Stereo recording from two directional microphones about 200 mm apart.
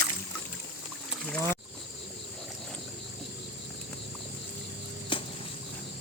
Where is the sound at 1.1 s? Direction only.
5° left (ahead or behind).